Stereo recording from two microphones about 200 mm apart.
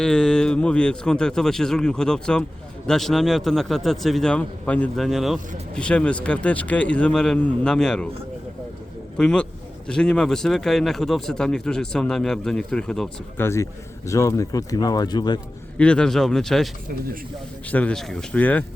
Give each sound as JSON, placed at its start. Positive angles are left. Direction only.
{"t": 0.0, "sound": "a man's voice", "side_deg": 5}
{"t": 9.1, "sound": "a man's voice", "side_deg": 5}
{"t": 15.8, "sound": "a man's voice", "side_deg": 5}
{"t": 17.7, "sound": "speech", "side_deg": 5}